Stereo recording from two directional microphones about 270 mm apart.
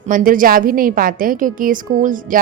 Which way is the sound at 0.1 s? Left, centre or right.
Right.